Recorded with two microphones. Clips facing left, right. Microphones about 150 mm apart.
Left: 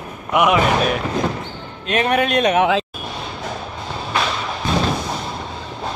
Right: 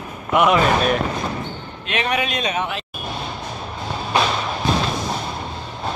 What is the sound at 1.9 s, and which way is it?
Speech, 45° left (ahead or behind).